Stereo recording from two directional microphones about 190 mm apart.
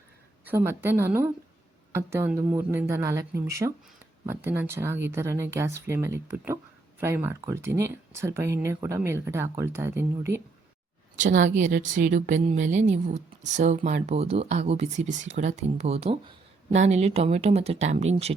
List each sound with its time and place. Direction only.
0.4 s speech: 10° right (ahead or behind)
11.2 s speech: 40° right (ahead or behind)